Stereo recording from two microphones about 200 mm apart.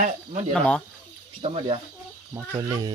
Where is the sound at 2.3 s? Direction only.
15° right (ahead or behind).